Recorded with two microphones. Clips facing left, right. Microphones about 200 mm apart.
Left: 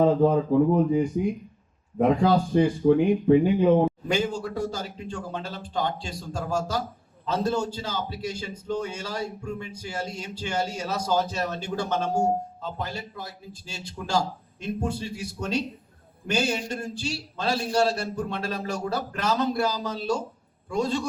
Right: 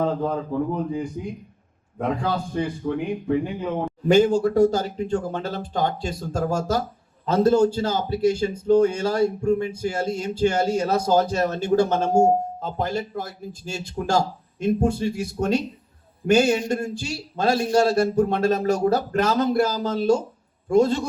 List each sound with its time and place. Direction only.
0.0 s speech: 15° left (ahead or behind)
2.0 s speech: 15° left (ahead or behind)
4.1 s a man's voice: 45° right (ahead or behind)